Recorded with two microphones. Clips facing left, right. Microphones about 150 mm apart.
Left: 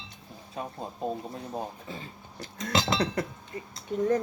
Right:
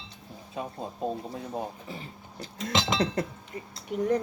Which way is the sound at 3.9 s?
15° right (ahead or behind).